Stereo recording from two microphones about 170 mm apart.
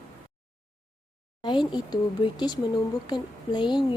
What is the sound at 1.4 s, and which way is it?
Speech, 25° left (ahead or behind).